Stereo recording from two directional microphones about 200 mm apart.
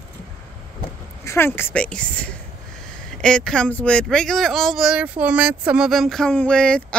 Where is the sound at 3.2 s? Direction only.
5° left (ahead or behind).